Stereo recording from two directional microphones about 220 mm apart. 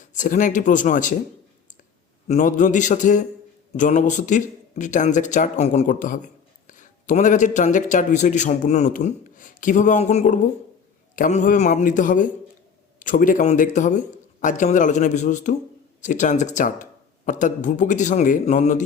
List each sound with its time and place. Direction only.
0.0 s speech: 35° left (ahead or behind)
2.2 s speech: 35° left (ahead or behind)